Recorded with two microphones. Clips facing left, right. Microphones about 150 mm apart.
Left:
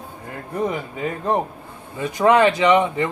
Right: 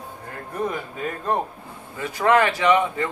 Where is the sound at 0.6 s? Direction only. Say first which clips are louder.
Left 3 dB; 20° left (ahead or behind).